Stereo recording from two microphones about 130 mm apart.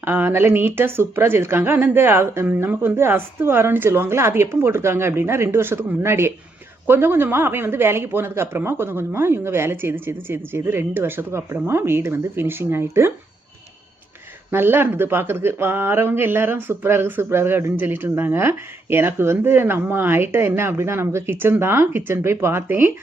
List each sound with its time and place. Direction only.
0.0 s a woman's voice: 15° right (ahead or behind)
14.5 s speech: 15° right (ahead or behind)